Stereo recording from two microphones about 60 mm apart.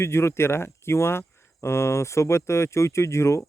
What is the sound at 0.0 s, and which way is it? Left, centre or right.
Speech, left.